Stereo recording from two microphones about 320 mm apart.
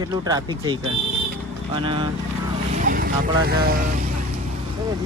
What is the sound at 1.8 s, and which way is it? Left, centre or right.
Speech, centre.